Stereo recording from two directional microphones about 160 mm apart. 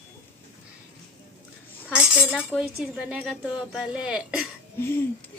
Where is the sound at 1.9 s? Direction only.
10° right (ahead or behind).